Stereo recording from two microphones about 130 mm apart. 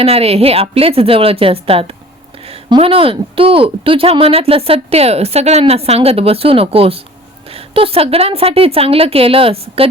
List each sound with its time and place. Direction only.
0.0 s speech: 50° right (ahead or behind)